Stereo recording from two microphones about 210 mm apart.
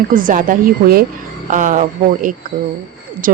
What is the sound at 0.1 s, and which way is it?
A woman's voice, 40° right (ahead or behind).